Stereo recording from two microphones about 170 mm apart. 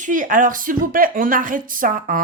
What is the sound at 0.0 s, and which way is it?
Speech, 50° right (ahead or behind).